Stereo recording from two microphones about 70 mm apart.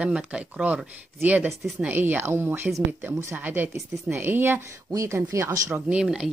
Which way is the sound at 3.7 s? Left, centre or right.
Right.